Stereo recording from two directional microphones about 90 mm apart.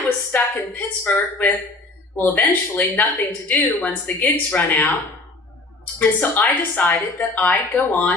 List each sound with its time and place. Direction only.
0.3 s speech: 20° left (ahead or behind)
6.0 s speech: 20° left (ahead or behind)